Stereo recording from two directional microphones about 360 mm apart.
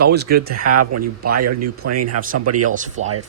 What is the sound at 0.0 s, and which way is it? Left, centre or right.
Speech, right.